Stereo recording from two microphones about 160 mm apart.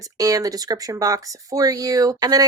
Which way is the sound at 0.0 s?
20° right (ahead or behind).